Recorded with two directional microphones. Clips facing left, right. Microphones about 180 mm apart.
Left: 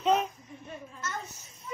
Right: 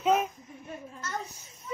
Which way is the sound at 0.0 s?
5° right (ahead or behind).